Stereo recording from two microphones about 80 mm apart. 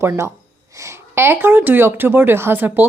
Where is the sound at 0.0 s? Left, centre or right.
Right.